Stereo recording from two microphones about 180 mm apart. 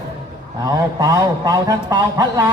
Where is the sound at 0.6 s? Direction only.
20° right (ahead or behind).